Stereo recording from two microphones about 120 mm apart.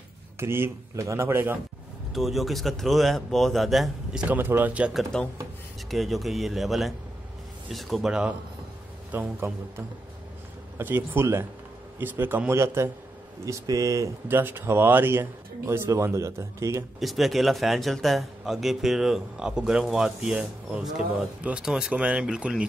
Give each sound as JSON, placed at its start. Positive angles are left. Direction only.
{"t": 0.4, "sound": "speech", "side_deg": -20}
{"t": 2.1, "sound": "speech", "side_deg": 0}
{"t": 17.0, "sound": "speech", "side_deg": 0}